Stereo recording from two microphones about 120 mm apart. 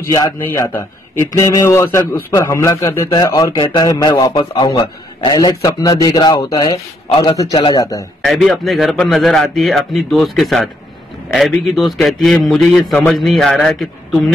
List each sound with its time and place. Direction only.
0.5 s a man's voice: 20° left (ahead or behind)
7.5 s a man's voice: 45° left (ahead or behind)
7.8 s a man's voice: 25° left (ahead or behind)
8.2 s a man's voice: centre (ahead or behind)